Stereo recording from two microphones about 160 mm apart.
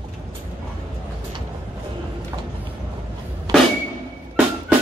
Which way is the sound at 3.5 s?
25° right (ahead or behind).